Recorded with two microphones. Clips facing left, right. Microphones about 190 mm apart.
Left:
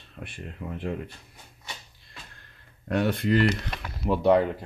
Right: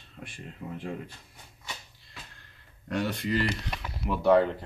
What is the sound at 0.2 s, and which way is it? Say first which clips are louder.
Speech: left 3 dB; 60° left (ahead or behind).